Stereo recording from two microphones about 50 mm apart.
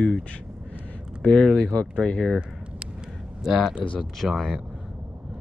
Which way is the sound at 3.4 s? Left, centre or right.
Centre.